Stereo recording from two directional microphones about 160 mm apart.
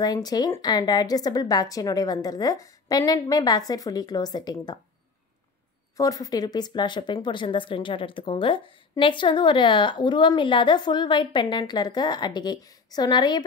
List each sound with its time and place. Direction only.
0.0 s speech: 25° left (ahead or behind)
5.9 s speech: 20° left (ahead or behind)